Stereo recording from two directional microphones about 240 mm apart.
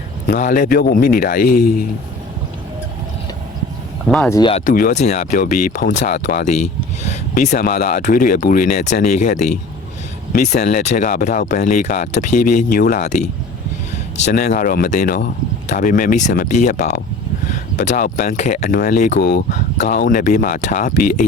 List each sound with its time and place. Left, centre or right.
0.3 s speech: left
1.5 s speech: left
4.1 s speech: centre
4.4 s speech: left
4.6 s speech: left
7.0 s speech: left